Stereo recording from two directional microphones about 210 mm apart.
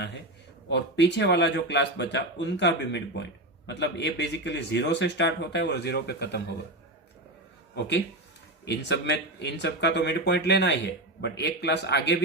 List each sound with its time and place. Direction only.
0.7 s speech: 55° left (ahead or behind)
7.8 s speech: 55° left (ahead or behind)